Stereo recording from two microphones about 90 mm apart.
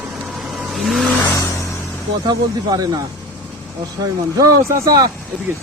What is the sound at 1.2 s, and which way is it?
Vehicle, 35° left (ahead or behind).